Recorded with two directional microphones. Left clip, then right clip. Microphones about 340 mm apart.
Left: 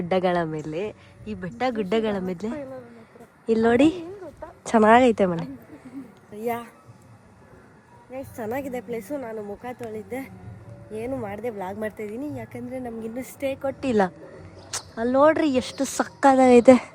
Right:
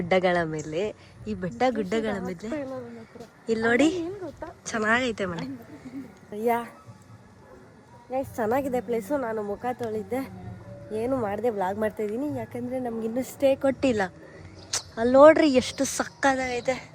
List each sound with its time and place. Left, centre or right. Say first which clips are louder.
0.1 s speech: even; centre
4.2 s a sound: right 2 dB; right
4.6 s a woman's voice: left 9 dB; centre
6.3 s a woman's voice: right 3 dB; centre
8.1 s speech: right 5 dB; centre
13.8 s speech: left 2 dB; centre